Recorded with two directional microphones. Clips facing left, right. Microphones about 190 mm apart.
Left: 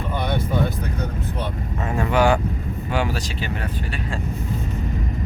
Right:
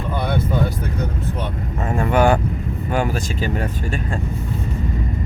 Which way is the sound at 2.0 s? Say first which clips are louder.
Right 2 dB; 50° right (ahead or behind).